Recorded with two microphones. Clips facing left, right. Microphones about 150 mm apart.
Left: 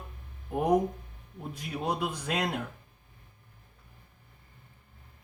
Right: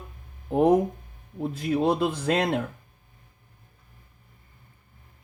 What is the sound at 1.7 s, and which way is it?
Speech, 90° right.